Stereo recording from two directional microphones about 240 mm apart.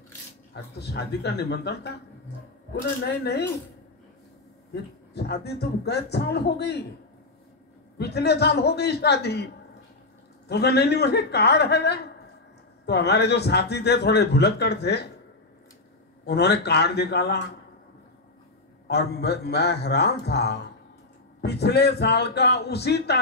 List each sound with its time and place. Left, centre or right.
0.7 s a man's voice: left
5.1 s a man's voice: left
8.0 s a man's voice: left
10.5 s a man's voice: left
16.3 s a man's voice: left
18.9 s a man's voice: left